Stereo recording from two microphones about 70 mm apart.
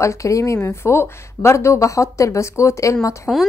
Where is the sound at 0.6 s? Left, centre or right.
Left.